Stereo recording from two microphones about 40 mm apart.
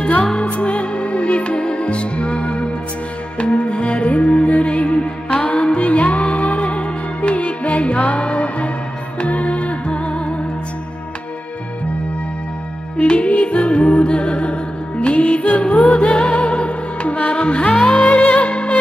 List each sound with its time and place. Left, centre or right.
0.2 s music: left
5.8 s music: left
12.9 s music: left
15.7 s music: left